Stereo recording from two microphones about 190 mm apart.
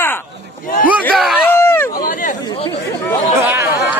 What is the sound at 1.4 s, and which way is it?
Run, 15° left (ahead or behind).